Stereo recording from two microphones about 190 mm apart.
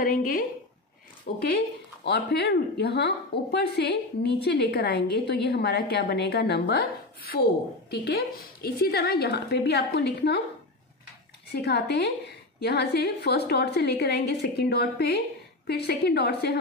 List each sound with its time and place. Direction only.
0.0 s a woman's voice: 50° left (ahead or behind)
11.5 s a woman's voice: 60° left (ahead or behind)